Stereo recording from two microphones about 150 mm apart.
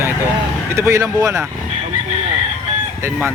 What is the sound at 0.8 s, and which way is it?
Speech, 20° right (ahead or behind).